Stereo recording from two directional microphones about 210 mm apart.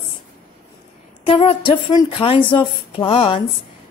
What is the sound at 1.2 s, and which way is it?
Speech, 25° left (ahead or behind).